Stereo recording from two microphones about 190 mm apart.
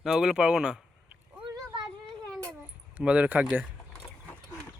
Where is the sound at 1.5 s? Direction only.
25° right (ahead or behind).